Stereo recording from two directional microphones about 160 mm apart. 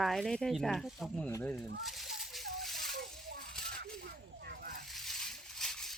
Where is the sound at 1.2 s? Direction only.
10° left (ahead or behind).